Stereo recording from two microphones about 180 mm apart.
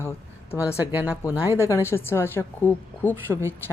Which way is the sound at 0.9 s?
10° right (ahead or behind).